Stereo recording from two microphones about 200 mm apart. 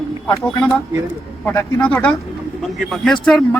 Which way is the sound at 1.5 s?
10° left (ahead or behind).